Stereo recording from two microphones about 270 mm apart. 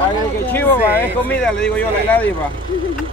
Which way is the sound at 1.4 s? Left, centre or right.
Centre.